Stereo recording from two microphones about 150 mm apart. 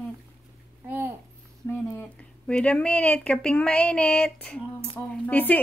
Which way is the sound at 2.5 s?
5° left (ahead or behind).